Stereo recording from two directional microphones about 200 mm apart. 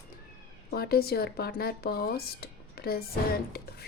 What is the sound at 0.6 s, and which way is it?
Speech, 50° left (ahead or behind).